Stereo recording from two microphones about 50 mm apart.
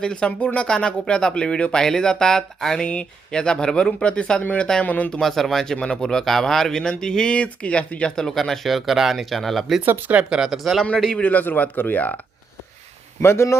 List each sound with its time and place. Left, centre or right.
0.0 s speech: centre
4.9 s speech: left
5.2 s speech: centre; by 8.1 s left
8.1 s speech: centre
10.2 s speech: centre
10.5 s speech: centre
11.2 s speech: left
13.2 s a man's voice: left